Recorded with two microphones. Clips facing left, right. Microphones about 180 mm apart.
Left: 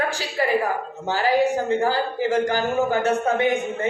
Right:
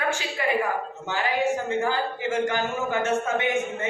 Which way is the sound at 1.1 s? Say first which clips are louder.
Left 5 dB; 35° left (ahead or behind).